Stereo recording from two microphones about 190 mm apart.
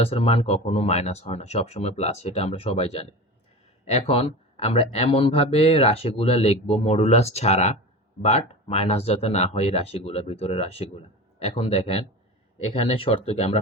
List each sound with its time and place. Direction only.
0.0 s speech: 30° left (ahead or behind)